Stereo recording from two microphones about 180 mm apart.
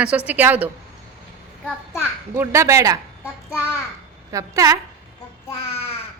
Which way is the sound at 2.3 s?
15° right (ahead or behind).